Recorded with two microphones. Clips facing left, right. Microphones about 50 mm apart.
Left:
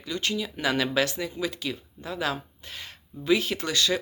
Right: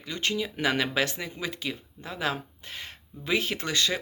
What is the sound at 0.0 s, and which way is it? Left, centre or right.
Speech, right.